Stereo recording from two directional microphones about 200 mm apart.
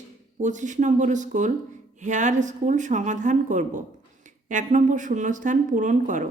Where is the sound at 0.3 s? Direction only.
40° right (ahead or behind).